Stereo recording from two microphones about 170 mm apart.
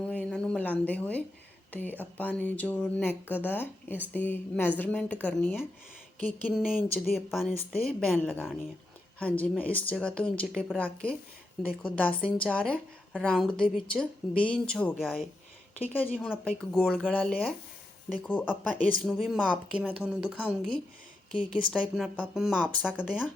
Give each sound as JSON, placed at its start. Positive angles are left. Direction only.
{"t": 0.0, "sound": "a sound", "side_deg": 5}
{"t": 1.7, "sound": "speech", "side_deg": 10}
{"t": 6.5, "sound": "speech", "side_deg": 0}
{"t": 21.3, "sound": "speech", "side_deg": 30}
{"t": 21.7, "sound": "speech", "side_deg": 0}